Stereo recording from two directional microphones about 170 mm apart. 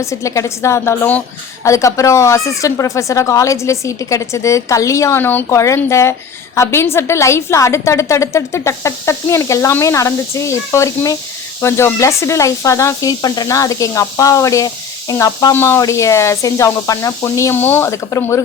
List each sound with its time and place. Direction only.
0.0 s speech: 20° left (ahead or behind)